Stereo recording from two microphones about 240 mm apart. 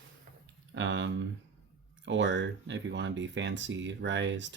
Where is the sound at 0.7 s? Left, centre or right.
Right.